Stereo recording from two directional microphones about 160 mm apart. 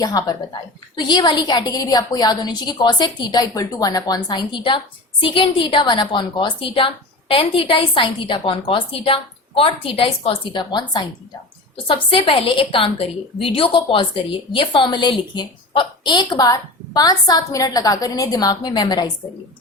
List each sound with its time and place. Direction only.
0.0 s a woman's voice: 20° left (ahead or behind)